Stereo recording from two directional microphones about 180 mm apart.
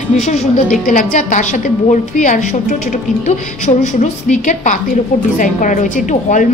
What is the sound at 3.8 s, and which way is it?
A woman's voice, 40° left (ahead or behind).